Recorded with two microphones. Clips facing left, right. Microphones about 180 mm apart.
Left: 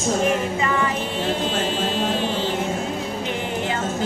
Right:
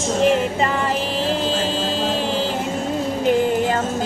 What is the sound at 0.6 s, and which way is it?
Music, 30° right (ahead or behind).